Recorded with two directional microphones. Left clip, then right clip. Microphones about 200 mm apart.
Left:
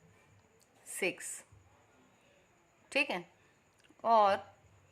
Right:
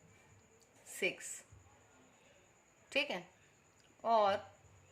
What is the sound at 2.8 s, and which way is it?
A woman's voice, 35° left (ahead or behind).